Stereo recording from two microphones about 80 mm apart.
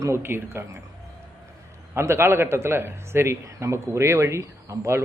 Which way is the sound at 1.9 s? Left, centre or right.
Right.